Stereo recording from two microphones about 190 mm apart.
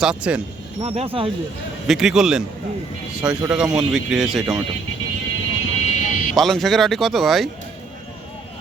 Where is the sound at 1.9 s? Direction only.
Centre (ahead or behind).